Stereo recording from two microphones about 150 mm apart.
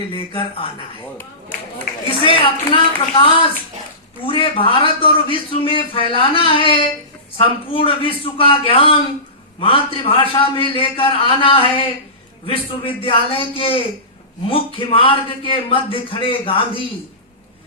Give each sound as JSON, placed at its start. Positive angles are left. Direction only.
{"t": 2.0, "sound": "a man's voice", "side_deg": 35}